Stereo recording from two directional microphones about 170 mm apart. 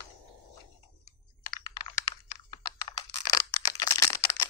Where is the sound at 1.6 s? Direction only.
25° left (ahead or behind).